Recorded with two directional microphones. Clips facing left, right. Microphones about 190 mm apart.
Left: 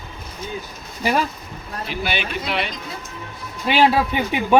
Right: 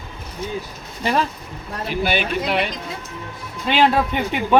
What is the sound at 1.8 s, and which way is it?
Speech, 45° right (ahead or behind).